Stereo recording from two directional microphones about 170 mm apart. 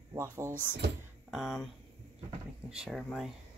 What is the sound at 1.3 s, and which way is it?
Speech, centre (ahead or behind).